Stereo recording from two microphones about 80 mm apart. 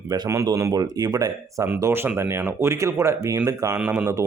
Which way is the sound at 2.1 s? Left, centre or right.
Right.